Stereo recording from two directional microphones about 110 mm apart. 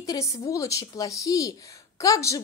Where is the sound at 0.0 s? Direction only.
30° left (ahead or behind).